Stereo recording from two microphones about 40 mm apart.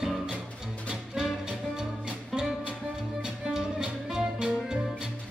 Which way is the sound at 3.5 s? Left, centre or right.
Centre.